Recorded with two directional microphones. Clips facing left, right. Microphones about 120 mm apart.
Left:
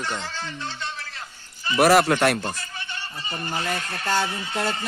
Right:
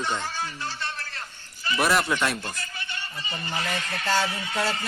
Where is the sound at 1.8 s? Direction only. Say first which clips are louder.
Left 7 dB; 65° left (ahead or behind).